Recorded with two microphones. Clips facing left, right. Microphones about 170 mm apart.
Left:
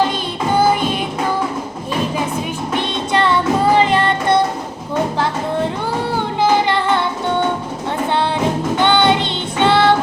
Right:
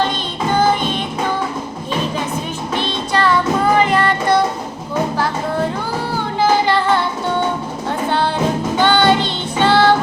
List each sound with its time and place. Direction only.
2.7 s music: 20° left (ahead or behind)
6.4 s music: 20° left (ahead or behind)
8.8 s music: 20° left (ahead or behind)